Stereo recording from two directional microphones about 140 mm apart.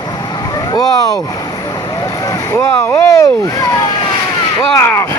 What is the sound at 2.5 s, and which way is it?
Speech, 20° left (ahead or behind).